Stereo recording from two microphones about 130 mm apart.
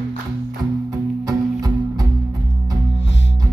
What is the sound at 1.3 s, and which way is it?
Music, 30° right (ahead or behind).